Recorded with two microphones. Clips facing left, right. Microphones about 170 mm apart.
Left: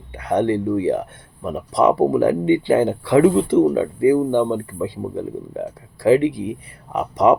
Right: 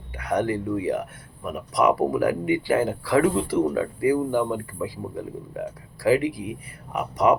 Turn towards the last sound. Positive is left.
turn(degrees=25)  # may be behind; listen again after turning